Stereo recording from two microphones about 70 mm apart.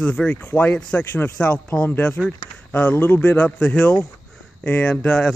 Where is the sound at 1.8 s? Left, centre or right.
Left.